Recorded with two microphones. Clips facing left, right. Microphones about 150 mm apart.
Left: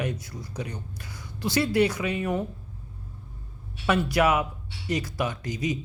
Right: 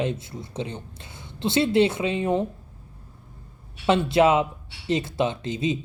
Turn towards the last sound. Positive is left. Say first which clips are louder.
# right 3 dB
turn(degrees=-25)  # may be behind; listen again after turning